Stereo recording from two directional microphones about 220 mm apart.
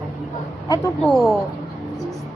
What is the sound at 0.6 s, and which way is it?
Speech, 15° left (ahead or behind).